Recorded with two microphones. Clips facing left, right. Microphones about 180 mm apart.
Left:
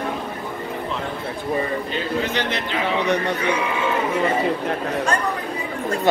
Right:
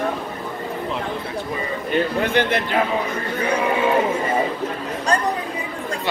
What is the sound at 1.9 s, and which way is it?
Speech, 55° right (ahead or behind).